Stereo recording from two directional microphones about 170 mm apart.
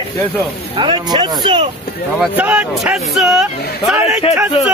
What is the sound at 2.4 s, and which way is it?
A man's voice, 10° right (ahead or behind).